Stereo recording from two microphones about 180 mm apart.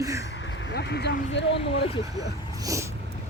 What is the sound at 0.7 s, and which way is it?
Speech, 70° left (ahead or behind).